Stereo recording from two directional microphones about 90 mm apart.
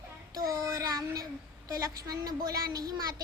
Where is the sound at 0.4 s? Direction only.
45° right (ahead or behind).